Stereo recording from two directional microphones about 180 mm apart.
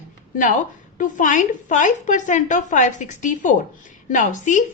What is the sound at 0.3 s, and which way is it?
A woman's voice, 45° left (ahead or behind).